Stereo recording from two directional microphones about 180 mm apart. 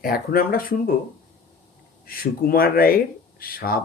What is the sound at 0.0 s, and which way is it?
Speech, 55° left (ahead or behind).